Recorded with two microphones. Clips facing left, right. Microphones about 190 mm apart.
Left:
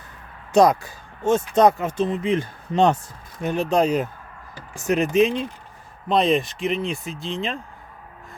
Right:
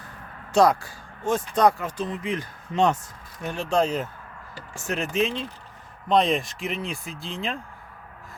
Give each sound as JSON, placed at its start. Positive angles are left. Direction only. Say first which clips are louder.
{"t": 0.5, "sound": "speech", "louder": "left 3 dB", "side_deg": 20}
{"t": 3.4, "sound": "speech", "louder": "left 4 dB", "side_deg": 20}
{"t": 6.1, "sound": "speech", "louder": "left 2 dB", "side_deg": 0}